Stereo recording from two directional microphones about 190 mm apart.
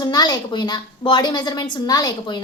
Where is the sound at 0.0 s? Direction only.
20° left (ahead or behind).